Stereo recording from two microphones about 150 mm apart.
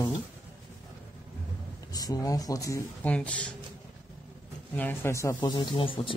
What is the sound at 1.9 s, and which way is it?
Speech, 25° left (ahead or behind).